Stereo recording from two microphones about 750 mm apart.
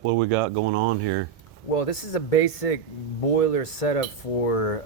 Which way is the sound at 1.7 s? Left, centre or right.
Left.